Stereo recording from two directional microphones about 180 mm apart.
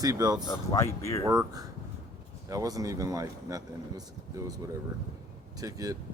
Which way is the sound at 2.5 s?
20° right (ahead or behind).